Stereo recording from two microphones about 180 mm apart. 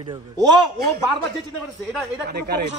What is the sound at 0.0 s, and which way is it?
Speech, 25° right (ahead or behind).